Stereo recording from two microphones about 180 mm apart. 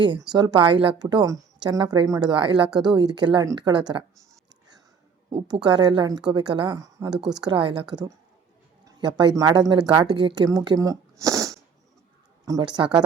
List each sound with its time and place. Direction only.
0.0 s a woman's voice: 25° right (ahead or behind)
5.6 s a woman's voice: 25° right (ahead or behind)